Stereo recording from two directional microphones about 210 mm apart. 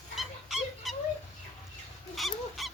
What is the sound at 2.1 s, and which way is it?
Goose, centre (ahead or behind).